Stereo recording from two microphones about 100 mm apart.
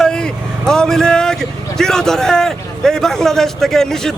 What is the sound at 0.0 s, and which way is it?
Vehicle, 5° left (ahead or behind).